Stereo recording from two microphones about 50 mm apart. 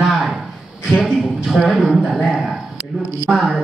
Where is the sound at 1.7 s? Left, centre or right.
Centre.